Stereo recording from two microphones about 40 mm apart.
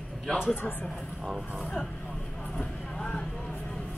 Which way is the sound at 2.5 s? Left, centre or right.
Centre.